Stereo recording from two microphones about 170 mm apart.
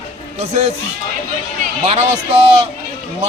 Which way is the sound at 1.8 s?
40° right (ahead or behind).